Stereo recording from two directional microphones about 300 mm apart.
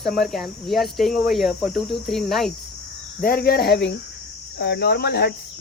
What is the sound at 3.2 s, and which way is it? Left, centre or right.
Cricket, left.